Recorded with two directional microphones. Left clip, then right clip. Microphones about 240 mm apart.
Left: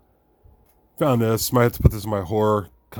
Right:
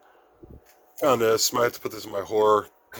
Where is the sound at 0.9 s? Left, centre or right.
Centre.